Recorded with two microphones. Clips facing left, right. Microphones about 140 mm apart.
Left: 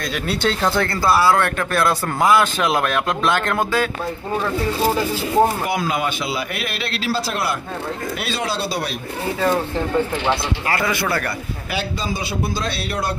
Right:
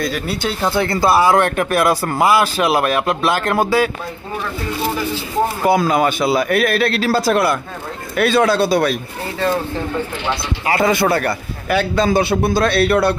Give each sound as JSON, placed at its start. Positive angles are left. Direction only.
{"t": 0.0, "sound": "speech", "side_deg": 0}
{"t": 5.7, "sound": "a man's voice", "side_deg": -40}
{"t": 10.7, "sound": "speech", "side_deg": -25}
{"t": 11.2, "sound": "a man's voice", "side_deg": -60}